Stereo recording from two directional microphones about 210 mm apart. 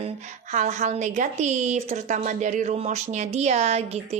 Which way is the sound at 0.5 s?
35° right (ahead or behind).